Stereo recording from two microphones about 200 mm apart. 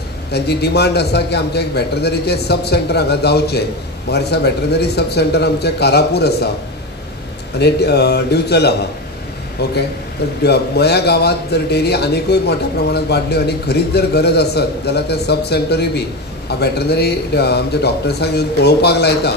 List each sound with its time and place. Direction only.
0.3 s a man's voice: 55° left (ahead or behind)
7.5 s a man's voice: 55° left (ahead or behind)